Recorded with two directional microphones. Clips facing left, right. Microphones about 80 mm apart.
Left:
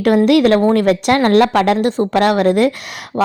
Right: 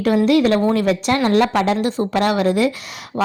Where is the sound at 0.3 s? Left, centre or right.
Left.